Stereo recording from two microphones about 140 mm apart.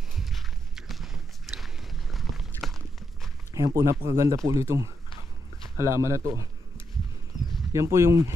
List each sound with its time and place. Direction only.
0.1 s walk: centre (ahead or behind)
3.5 s speech: 25° right (ahead or behind)
7.7 s speech: 20° right (ahead or behind)